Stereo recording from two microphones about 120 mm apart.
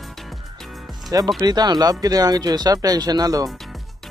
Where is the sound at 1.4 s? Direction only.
35° right (ahead or behind).